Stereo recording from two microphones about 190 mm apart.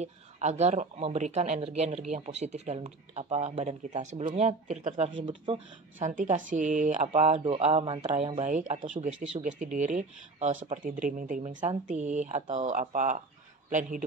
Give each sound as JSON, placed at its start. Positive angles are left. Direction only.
{"t": 0.0, "sound": "speech", "side_deg": -35}
{"t": 5.9, "sound": "speech", "side_deg": -40}
{"t": 8.5, "sound": "speech", "side_deg": -40}